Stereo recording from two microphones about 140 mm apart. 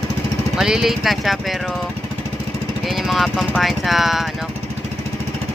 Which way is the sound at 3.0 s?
Centre (ahead or behind).